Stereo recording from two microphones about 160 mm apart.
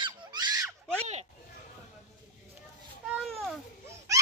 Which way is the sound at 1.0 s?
45° right (ahead or behind).